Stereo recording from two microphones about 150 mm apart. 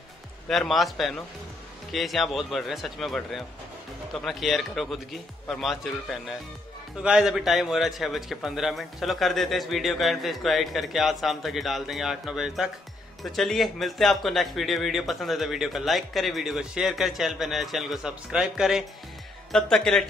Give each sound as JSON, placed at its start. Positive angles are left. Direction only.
{"t": 0.5, "sound": "a man's voice", "side_deg": 0}